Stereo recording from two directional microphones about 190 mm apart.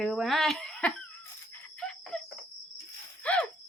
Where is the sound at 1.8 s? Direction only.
5° left (ahead or behind).